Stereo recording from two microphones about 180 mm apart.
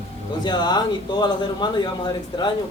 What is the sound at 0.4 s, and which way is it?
A man's voice, 25° left (ahead or behind).